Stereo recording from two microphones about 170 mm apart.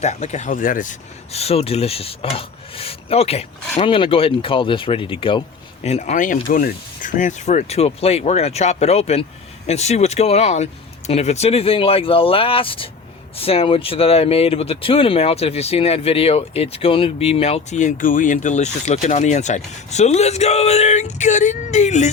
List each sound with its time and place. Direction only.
0.0 s speech: 40° left (ahead or behind)
5.8 s speech: 40° left (ahead or behind)